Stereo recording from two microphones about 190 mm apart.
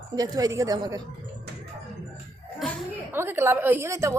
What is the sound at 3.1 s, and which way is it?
A woman's voice, 10° right (ahead or behind).